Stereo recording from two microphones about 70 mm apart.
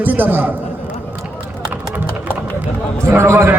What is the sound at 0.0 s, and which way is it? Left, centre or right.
Speech, right.